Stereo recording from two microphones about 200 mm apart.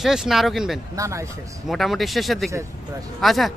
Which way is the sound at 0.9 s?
15° right (ahead or behind).